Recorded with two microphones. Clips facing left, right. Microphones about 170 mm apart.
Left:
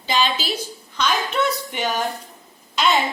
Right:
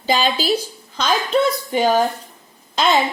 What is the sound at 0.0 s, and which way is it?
A woman's voice, 40° right (ahead or behind).